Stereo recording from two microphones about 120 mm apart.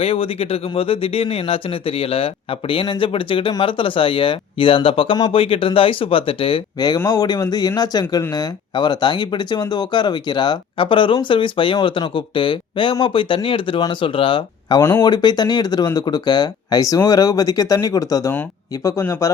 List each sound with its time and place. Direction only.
0.0 s speech: 55° left (ahead or behind)
6.7 s speech: 35° left (ahead or behind)
14.8 s speech: 20° left (ahead or behind)
15.0 s speech: 35° left (ahead or behind)